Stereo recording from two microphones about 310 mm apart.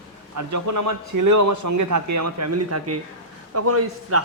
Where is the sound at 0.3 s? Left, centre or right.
Right.